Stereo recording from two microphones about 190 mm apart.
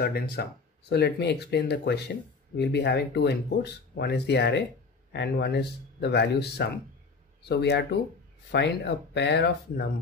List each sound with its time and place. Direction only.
0.0 s speech: 55° left (ahead or behind)